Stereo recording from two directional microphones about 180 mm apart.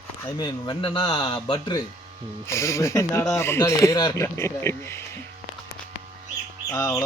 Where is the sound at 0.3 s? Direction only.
25° left (ahead or behind).